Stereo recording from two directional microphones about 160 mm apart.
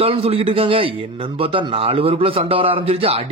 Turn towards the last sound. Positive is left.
turn(degrees=-40)  # may be behind; listen again after turning